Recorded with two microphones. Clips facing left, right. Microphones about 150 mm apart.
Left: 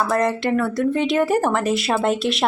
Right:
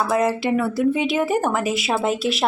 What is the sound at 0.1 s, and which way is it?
Speech, 5° right (ahead or behind).